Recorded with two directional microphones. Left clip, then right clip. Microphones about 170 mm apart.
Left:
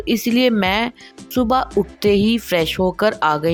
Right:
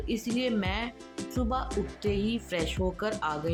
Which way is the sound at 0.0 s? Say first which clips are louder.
Left 14 dB; 65° left (ahead or behind).